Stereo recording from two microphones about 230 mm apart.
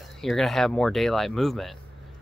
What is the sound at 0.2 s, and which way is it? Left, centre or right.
Speech, centre.